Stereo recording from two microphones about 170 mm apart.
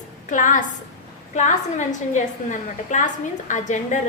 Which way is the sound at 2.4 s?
50° left (ahead or behind).